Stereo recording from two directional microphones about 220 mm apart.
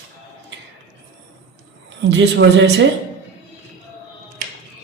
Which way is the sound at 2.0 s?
55° right (ahead or behind).